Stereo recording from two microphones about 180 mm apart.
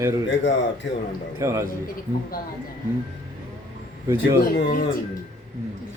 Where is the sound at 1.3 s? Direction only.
15° right (ahead or behind).